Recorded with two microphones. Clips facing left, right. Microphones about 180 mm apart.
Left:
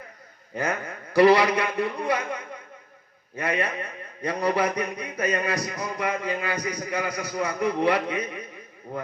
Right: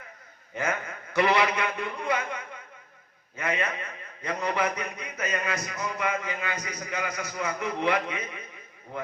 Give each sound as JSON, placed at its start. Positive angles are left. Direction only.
{"t": 0.5, "sound": "music", "side_deg": 35}